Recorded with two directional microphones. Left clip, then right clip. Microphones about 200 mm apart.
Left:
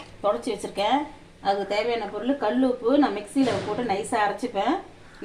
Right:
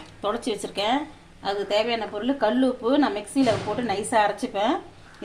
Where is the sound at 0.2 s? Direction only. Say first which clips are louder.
Left 2 dB; 40° right (ahead or behind).